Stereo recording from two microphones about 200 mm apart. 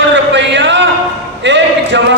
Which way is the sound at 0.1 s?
60° right (ahead or behind).